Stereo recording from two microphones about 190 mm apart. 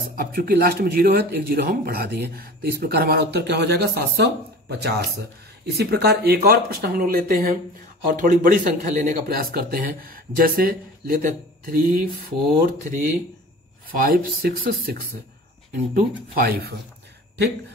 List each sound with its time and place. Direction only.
0.2 s a man's voice: 50° right (ahead or behind)